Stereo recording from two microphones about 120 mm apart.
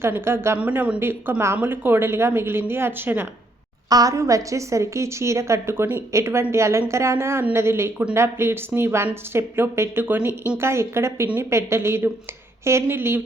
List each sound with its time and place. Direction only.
0.0 s a woman's voice: 20° right (ahead or behind)
3.8 s a woman's voice: 30° right (ahead or behind)